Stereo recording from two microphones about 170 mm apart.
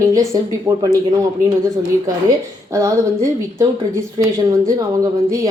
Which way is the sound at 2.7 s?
20° right (ahead or behind).